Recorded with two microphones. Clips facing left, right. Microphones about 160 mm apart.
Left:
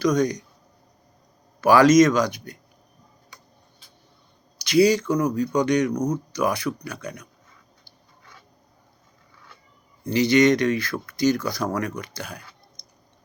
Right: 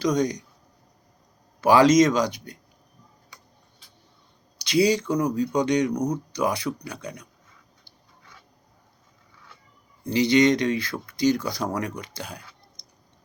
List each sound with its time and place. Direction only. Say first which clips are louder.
0.0 s speech: left 2 dB; 25° right (ahead or behind)
1.6 s speech: left 2 dB; 25° right (ahead or behind)
4.6 s speech: left 3 dB; 25° right (ahead or behind)
5.9 s speech: left 1 dB; 15° right (ahead or behind)
6.3 s speech: left 1 dB; 25° right (ahead or behind)
10.0 s speech: left 1 dB; 25° right (ahead or behind)